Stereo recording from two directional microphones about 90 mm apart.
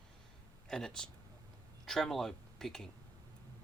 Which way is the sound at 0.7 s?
5° left (ahead or behind).